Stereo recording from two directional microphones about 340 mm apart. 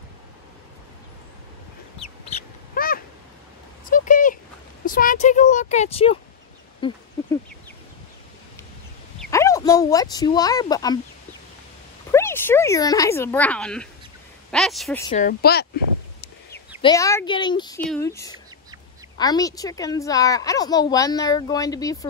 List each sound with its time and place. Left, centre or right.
2.7 s a sound: left
4.8 s a woman's voice: left
9.2 s speech: centre
12.1 s a woman's voice: centre
15.0 s speech: left
16.8 s a woman's voice: centre